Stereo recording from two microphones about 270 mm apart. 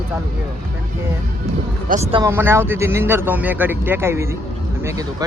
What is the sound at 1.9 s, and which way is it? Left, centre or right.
Speech, right.